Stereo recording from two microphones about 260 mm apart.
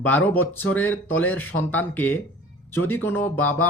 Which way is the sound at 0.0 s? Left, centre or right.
Centre.